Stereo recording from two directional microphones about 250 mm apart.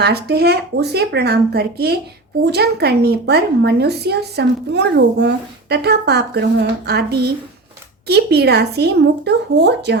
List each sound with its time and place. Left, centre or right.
0.0 s a woman's voice: right